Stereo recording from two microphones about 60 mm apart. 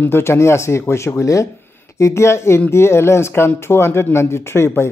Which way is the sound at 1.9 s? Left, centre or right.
Left.